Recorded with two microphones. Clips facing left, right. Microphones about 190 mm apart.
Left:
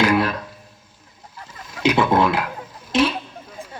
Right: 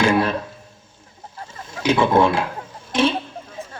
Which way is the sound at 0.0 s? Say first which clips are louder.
Even; 25° right (ahead or behind).